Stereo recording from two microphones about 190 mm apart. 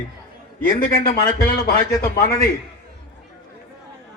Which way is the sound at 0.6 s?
50° left (ahead or behind).